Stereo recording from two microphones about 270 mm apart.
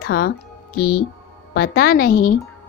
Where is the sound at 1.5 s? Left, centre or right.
Left.